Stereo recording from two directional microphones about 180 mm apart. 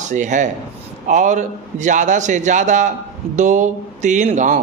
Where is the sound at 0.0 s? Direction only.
45° right (ahead or behind).